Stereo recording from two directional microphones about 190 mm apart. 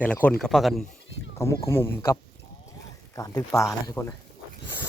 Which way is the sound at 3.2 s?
20° left (ahead or behind).